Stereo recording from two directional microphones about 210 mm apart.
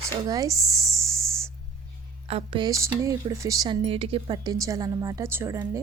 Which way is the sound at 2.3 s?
25° right (ahead or behind).